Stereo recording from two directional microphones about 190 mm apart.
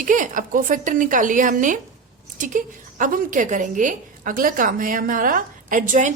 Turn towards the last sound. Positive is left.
turn(degrees=-40)  # may be behind; listen again after turning